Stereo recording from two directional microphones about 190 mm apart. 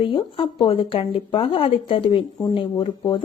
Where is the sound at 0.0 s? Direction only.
25° left (ahead or behind).